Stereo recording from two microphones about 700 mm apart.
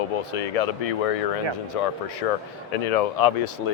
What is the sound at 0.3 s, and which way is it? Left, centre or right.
Speech, left.